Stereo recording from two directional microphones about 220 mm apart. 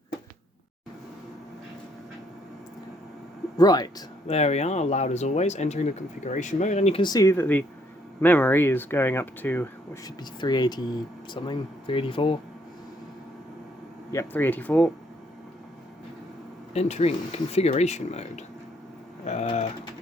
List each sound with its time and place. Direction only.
3.6 s speech: 15° left (ahead or behind)
4.4 s speech: 30° left (ahead or behind)
14.1 s speech: 10° left (ahead or behind)
16.7 s speech: 30° left (ahead or behind)